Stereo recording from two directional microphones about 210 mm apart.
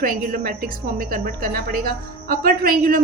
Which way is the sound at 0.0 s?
40° right (ahead or behind).